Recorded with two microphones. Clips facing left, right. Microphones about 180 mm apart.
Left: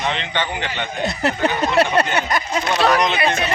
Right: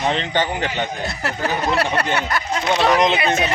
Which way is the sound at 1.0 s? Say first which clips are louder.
Left 5 dB; 20° left (ahead or behind).